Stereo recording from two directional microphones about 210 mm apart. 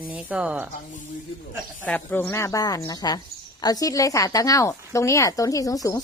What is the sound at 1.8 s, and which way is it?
Speech, 5° left (ahead or behind).